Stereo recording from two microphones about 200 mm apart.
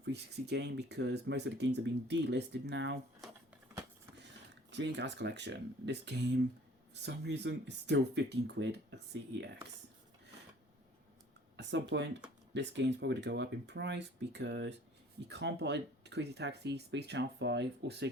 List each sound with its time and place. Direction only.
0.0 s speech: 55° right (ahead or behind)
4.7 s speech: 60° right (ahead or behind)
11.5 s speech: 60° right (ahead or behind)